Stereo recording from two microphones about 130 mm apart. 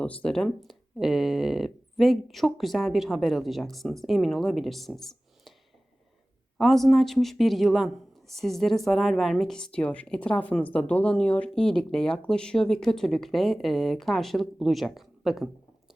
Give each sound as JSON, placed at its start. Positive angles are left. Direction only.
{"t": 0.0, "sound": "speech", "side_deg": 10}
{"t": 6.6, "sound": "speech", "side_deg": 0}